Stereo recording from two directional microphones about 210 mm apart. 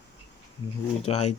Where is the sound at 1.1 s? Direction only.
30° left (ahead or behind).